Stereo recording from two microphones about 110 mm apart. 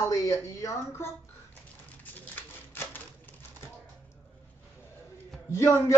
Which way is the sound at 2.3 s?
20° left (ahead or behind).